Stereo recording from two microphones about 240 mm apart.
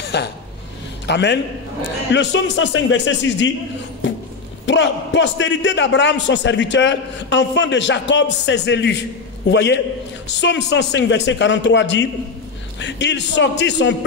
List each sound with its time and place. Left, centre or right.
0.1 s a man's voice: left
4.6 s a man's voice: left